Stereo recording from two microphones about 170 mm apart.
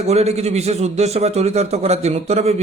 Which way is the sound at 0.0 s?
40° right (ahead or behind).